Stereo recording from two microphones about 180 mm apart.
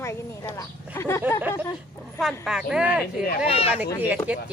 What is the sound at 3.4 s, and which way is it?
Speech, 35° left (ahead or behind).